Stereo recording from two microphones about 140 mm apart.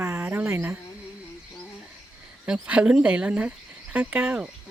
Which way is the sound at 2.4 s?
5° right (ahead or behind).